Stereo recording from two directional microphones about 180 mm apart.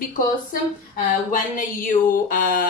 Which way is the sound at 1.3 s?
50° left (ahead or behind).